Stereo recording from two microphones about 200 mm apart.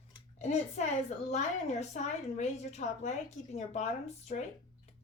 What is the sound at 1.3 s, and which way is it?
Speech, 35° left (ahead or behind).